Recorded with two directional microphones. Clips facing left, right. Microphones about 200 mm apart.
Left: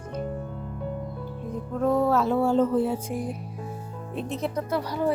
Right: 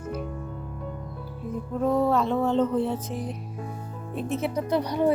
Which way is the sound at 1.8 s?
Centre (ahead or behind).